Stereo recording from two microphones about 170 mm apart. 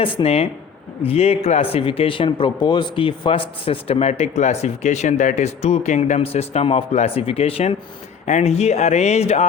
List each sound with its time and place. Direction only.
0.0 s speech: 30° left (ahead or behind)